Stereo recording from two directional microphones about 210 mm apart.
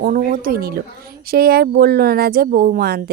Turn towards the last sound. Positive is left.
turn(degrees=-45)  # may be behind; listen again after turning